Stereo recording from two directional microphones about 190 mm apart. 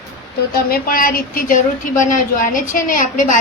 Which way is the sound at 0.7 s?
50° left (ahead or behind).